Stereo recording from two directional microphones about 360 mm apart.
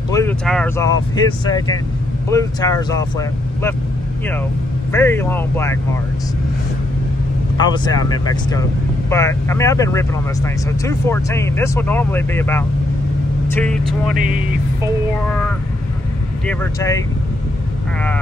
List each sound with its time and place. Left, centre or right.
0.1 s speech: centre
4.9 s speech: centre
7.5 s speech: centre
14.1 s speech: right
15.2 s speech: centre